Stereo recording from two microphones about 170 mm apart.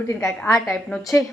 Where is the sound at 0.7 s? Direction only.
Centre (ahead or behind).